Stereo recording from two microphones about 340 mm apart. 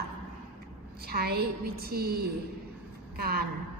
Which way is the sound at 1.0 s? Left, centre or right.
Right.